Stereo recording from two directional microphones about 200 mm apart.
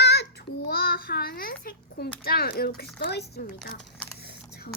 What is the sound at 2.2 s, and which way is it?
Speech, 50° left (ahead or behind).